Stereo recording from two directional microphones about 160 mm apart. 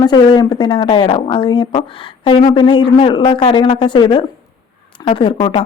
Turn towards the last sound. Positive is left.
turn(degrees=30)  # may be behind; listen again after turning